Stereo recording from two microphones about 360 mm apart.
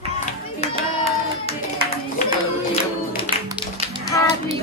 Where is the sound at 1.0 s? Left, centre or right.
Centre.